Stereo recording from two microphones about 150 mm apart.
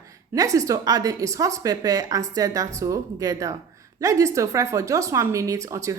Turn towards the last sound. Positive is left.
turn(degrees=-20)  # may be behind; listen again after turning